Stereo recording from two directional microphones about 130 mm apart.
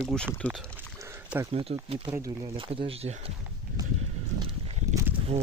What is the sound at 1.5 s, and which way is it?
Speech, 50° right (ahead or behind).